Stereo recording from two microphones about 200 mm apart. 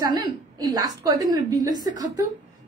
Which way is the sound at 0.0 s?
20° right (ahead or behind).